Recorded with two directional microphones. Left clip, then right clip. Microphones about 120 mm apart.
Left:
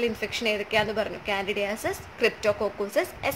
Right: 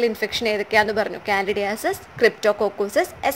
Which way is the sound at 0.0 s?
40° right (ahead or behind).